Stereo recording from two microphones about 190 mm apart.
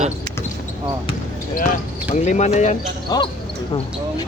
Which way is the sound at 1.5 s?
45° left (ahead or behind).